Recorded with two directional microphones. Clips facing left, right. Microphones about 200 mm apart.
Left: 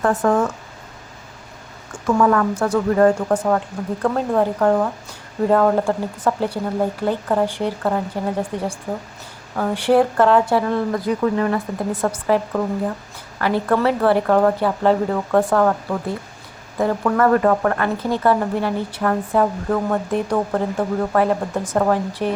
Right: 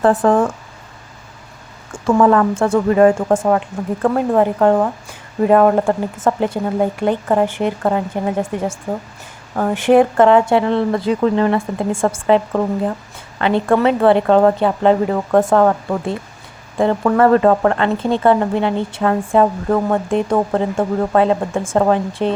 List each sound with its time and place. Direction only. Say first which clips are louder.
0.0 s speech: right 4 dB; 30° right (ahead or behind)
2.0 s speech: right 4 dB; 30° right (ahead or behind)
3.5 s speech: right 3 dB; 10° right (ahead or behind)
6.2 s speech: right 3 dB; 20° right (ahead or behind)
13.4 s speech: right 4 dB; 20° right (ahead or behind)